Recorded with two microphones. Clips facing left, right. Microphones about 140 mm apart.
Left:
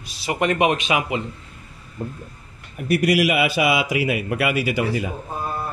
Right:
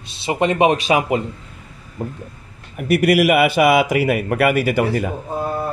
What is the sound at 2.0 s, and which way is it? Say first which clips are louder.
A man's voice: right 3 dB; 65° right (ahead or behind).